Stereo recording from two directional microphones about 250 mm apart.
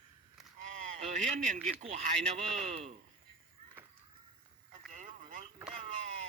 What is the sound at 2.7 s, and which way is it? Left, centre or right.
Speech, right.